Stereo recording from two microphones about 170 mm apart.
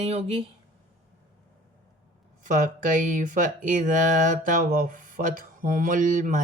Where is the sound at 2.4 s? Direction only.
50° right (ahead or behind).